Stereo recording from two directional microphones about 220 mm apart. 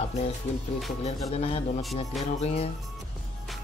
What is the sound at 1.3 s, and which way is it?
Speech, 25° left (ahead or behind).